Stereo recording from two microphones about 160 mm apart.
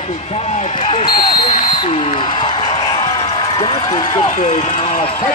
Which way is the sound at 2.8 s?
25° left (ahead or behind).